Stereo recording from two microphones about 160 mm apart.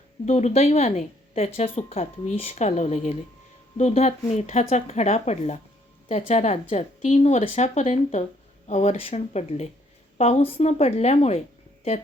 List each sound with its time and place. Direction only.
0.3 s a woman's voice: 40° left (ahead or behind)